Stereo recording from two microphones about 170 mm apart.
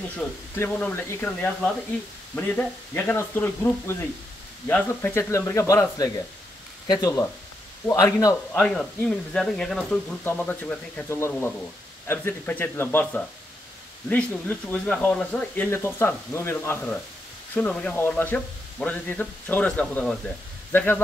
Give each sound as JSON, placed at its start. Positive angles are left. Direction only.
{"t": 0.6, "sound": "a man's voice", "side_deg": 10}
{"t": 8.5, "sound": "speech", "side_deg": 5}